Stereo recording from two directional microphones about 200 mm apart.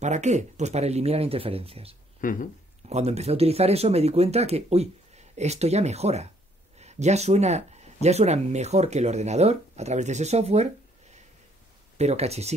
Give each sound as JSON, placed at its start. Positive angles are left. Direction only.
{"t": 0.0, "sound": "speech", "side_deg": -35}
{"t": 2.2, "sound": "speech", "side_deg": 40}
{"t": 2.9, "sound": "speech", "side_deg": -30}